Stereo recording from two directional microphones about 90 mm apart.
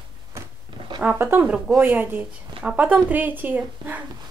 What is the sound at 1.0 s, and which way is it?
Speech, 20° right (ahead or behind).